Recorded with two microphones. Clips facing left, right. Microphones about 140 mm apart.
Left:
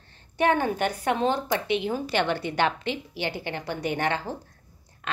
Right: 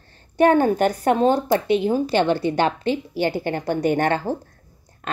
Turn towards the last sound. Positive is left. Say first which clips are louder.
# right 7 dB
turn(degrees=-50)  # may be behind; listen again after turning